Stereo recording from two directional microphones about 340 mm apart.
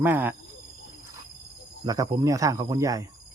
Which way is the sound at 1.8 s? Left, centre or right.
Centre.